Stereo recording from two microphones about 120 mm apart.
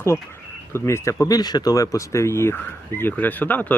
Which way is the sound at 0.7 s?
20° left (ahead or behind).